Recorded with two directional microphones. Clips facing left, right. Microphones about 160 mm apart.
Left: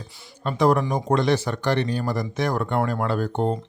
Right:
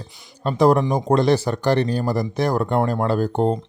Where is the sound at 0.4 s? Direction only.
35° right (ahead or behind).